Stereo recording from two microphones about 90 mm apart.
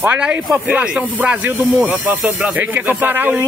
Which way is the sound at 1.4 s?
20° right (ahead or behind).